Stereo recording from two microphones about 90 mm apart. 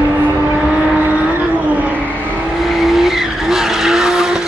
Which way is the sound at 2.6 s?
Centre (ahead or behind).